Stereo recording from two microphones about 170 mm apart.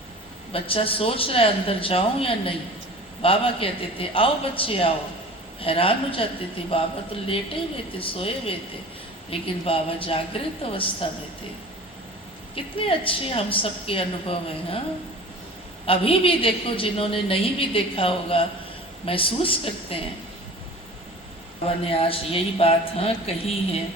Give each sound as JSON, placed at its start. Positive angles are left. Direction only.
{"t": 0.5, "sound": "a woman's voice", "side_deg": 35}
{"t": 12.5, "sound": "a woman's voice", "side_deg": 30}
{"t": 15.9, "sound": "a woman's voice", "side_deg": 35}
{"t": 21.8, "sound": "a woman's voice", "side_deg": 35}